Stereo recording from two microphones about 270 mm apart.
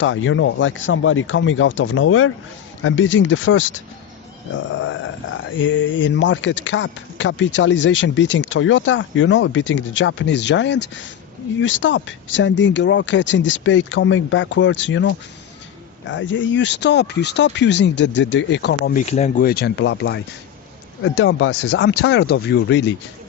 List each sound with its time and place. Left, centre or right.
0.0 s speech: left